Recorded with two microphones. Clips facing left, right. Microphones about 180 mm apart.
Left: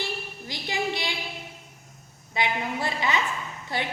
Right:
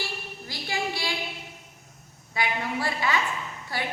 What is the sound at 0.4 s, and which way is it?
Child singing, 20° left (ahead or behind).